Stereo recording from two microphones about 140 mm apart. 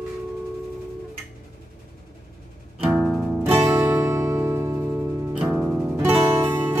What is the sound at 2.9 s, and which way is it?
Music, 5° right (ahead or behind).